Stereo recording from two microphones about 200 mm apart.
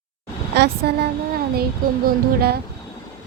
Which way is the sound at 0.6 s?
55° right (ahead or behind).